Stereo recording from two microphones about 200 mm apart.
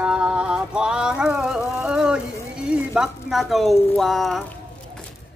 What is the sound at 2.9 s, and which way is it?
Speech, centre (ahead or behind).